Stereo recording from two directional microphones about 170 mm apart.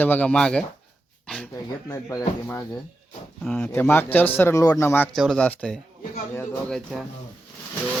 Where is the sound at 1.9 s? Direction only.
20° left (ahead or behind).